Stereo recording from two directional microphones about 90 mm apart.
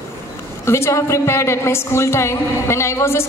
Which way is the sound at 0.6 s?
30° left (ahead or behind).